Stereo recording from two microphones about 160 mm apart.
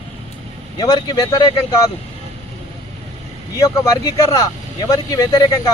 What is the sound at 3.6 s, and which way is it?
A man's voice, 20° left (ahead or behind).